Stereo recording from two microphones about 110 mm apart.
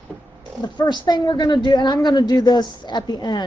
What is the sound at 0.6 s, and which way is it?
A woman's voice, 40° left (ahead or behind).